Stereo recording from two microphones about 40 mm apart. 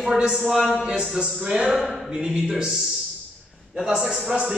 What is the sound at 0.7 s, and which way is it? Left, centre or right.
Speech, right.